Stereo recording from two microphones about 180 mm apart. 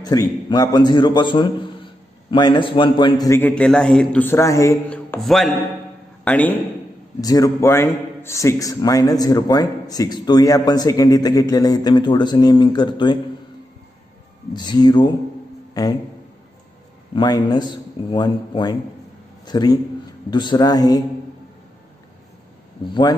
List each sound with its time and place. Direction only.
0.0 s a man's voice: 20° left (ahead or behind)
3.3 s a man's voice: 10° left (ahead or behind)
7.2 s a man's voice: 20° left (ahead or behind)
14.5 s a man's voice: 25° left (ahead or behind)
17.1 s a man's voice: 20° left (ahead or behind)